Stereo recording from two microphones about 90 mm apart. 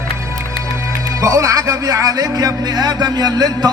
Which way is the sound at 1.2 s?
35° right (ahead or behind).